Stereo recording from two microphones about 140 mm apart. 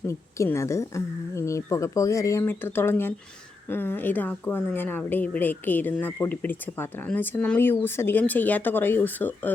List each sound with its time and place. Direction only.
0.1 s a woman's voice: 20° left (ahead or behind)